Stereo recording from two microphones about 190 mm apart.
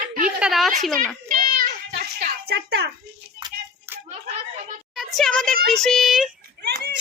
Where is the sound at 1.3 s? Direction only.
50° right (ahead or behind).